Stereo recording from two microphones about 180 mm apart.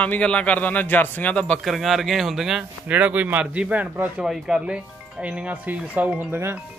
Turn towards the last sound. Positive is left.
turn(degrees=-10)  # may be behind; listen again after turning